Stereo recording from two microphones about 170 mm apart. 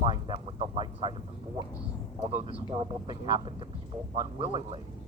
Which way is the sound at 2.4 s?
35° right (ahead or behind).